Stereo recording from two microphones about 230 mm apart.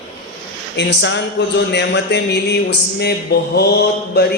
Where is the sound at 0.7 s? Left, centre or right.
Left.